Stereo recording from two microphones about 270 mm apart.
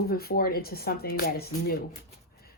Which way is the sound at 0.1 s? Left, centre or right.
Left.